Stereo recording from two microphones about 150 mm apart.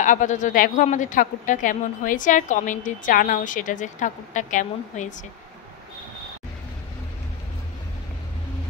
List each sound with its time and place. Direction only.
0.0 s speech: 55° left (ahead or behind)